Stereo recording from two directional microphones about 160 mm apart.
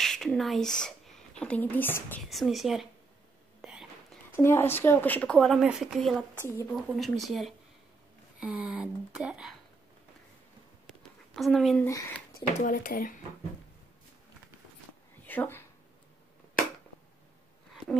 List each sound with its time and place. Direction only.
0.0 s a woman's voice: 5° left (ahead or behind)
2.2 s speech: centre (ahead or behind)
3.6 s whispering: centre (ahead or behind)
4.3 s speech: 15° left (ahead or behind); by 9.6 s 5° right (ahead or behind)
11.0 s a sound: centre (ahead or behind)
11.8 s speech: 20° left (ahead or behind)
12.4 s speech: 70° left (ahead or behind)
15.2 s speech: 10° left (ahead or behind)